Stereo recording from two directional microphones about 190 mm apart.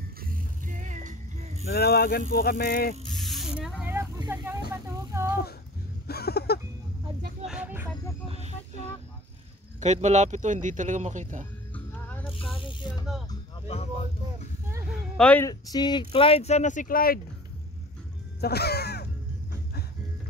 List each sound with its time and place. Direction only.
0.2 s music: 45° right (ahead or behind)
1.7 s speech: 55° left (ahead or behind)
3.2 s snake: centre (ahead or behind)
3.9 s vehicle: 15° right (ahead or behind)
4.8 s speech: 15° right (ahead or behind)
6.0 s a sound: 55° left (ahead or behind)
7.4 s a sound: 5° right (ahead or behind)
8.5 s a sound: 30° left (ahead or behind)
9.8 s speech: 40° right (ahead or behind)
11.7 s music: 10° left (ahead or behind)
15.1 s speech: 5° left (ahead or behind)
15.4 s speech: 20° left (ahead or behind); by 17.2 s 50° left (ahead or behind)
18.4 s crow: 60° left (ahead or behind)